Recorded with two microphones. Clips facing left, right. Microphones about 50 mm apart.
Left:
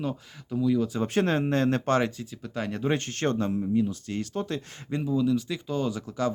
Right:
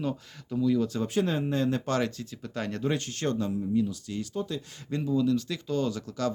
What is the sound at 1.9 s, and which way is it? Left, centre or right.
Speech, left.